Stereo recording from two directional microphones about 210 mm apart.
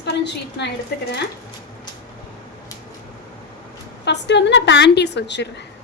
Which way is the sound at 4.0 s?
55° left (ahead or behind).